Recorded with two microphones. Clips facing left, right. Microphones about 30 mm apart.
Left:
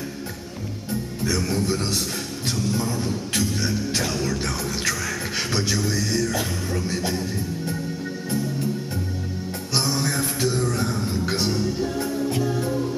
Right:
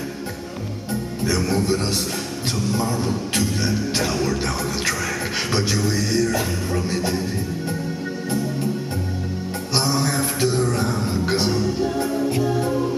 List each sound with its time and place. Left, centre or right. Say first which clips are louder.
1.2 s music: right 3 dB; centre
5.5 s music: right 2 dB; centre
9.8 s music: right 3 dB; centre